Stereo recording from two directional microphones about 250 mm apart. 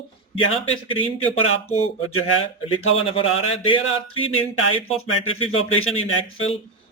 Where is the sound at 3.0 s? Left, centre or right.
Left.